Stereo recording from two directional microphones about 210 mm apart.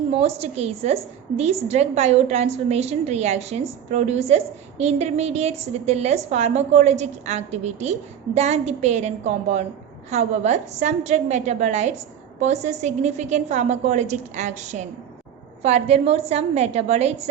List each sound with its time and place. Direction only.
0.2 s a woman's voice: 30° right (ahead or behind)